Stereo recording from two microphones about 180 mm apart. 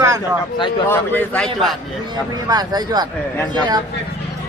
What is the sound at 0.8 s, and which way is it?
Speech, 10° left (ahead or behind).